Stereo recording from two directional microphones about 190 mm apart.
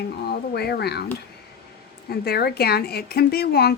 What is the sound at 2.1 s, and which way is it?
Speech, 55° left (ahead or behind).